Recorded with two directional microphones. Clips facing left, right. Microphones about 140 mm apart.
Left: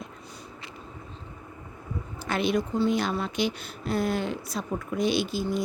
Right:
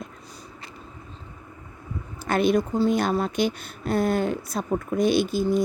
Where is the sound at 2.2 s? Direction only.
50° right (ahead or behind).